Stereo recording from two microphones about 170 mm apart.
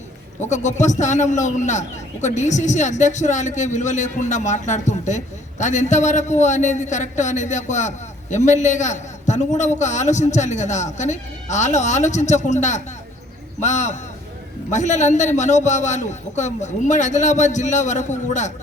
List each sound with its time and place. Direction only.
0.5 s speech: 45° left (ahead or behind)